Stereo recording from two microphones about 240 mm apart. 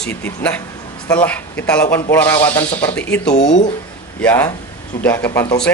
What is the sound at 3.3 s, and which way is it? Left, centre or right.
Speech, left.